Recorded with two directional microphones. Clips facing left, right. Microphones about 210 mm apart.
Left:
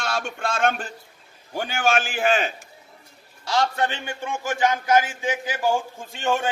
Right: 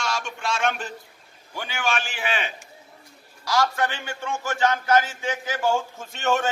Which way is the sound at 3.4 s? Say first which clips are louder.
Even; 25° left (ahead or behind).